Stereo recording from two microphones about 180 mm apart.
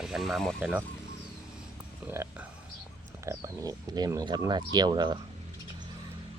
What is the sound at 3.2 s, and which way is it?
Speech, 15° right (ahead or behind).